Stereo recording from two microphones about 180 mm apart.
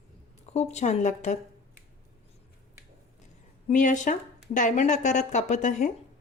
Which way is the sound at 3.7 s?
45° left (ahead or behind).